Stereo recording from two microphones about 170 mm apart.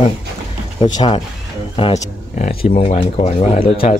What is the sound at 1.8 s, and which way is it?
Speech, 45° left (ahead or behind).